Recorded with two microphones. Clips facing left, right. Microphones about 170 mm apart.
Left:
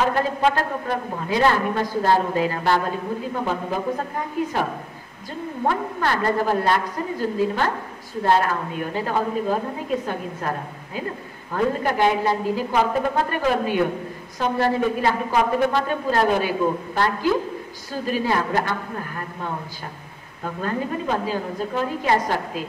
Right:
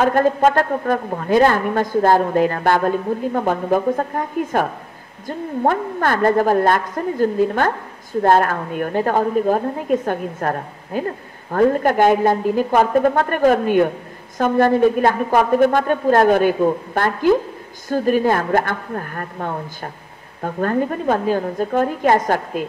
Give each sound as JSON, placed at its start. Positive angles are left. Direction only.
{"t": 0.0, "sound": "a woman's voice", "side_deg": -50}